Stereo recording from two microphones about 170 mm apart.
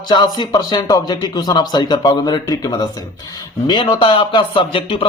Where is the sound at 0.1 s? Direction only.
25° left (ahead or behind).